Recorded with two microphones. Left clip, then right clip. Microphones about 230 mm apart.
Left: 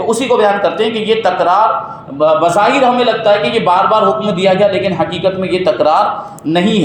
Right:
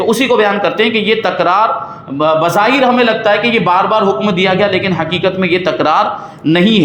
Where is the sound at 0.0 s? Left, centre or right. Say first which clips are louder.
Even; right.